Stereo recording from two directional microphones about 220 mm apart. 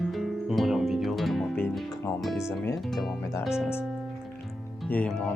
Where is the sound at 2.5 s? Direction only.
10° left (ahead or behind).